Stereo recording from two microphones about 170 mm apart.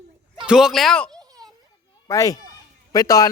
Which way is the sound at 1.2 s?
20° right (ahead or behind).